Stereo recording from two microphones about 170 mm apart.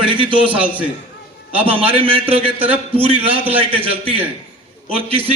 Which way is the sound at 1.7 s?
35° right (ahead or behind).